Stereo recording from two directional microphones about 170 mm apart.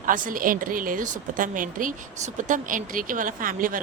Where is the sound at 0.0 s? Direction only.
50° right (ahead or behind).